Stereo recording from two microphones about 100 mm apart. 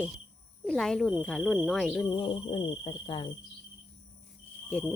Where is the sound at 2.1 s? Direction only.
55° left (ahead or behind).